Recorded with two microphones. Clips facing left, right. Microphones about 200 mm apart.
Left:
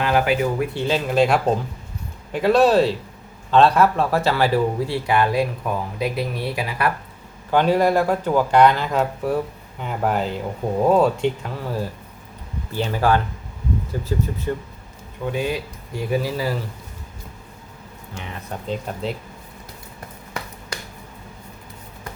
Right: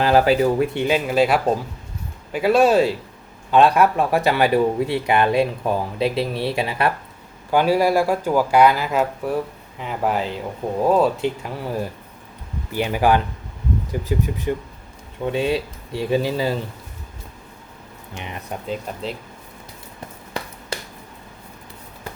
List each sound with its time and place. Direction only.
0.0 s speech: 35° right (ahead or behind)
0.7 s speech: 15° right (ahead or behind)
7.5 s speech: 10° right (ahead or behind)
12.7 s speech: 15° right (ahead or behind)
15.2 s speech: 25° right (ahead or behind)
18.7 s speech: centre (ahead or behind)